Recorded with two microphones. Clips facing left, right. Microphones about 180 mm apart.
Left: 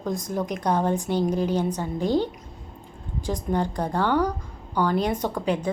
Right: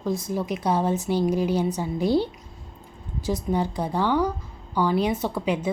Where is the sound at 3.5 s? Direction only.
5° right (ahead or behind).